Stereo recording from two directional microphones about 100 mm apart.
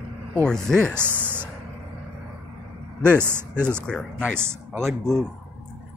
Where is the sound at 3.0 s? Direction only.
20° right (ahead or behind).